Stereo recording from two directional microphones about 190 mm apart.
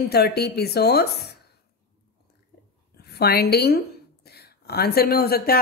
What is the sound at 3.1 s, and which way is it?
Speech, 55° left (ahead or behind).